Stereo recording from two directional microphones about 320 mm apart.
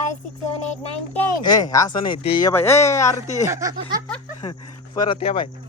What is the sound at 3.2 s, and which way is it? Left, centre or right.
Speech, left.